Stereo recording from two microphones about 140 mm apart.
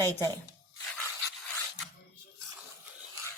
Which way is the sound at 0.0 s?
25° right (ahead or behind).